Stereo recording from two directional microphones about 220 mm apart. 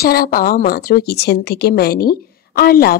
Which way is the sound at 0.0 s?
45° left (ahead or behind).